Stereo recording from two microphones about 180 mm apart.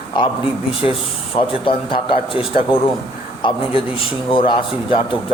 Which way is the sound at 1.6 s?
30° left (ahead or behind).